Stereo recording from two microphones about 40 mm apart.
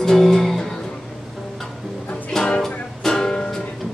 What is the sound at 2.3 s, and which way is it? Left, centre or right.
Music, centre.